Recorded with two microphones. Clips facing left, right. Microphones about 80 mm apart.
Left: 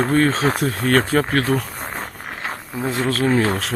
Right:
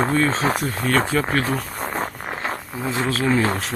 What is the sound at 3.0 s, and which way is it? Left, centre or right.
Speech, left.